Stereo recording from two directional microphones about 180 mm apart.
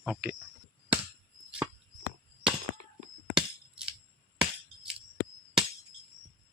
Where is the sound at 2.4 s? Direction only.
5° right (ahead or behind).